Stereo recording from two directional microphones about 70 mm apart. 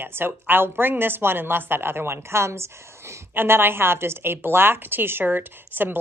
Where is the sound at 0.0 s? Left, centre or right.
Right.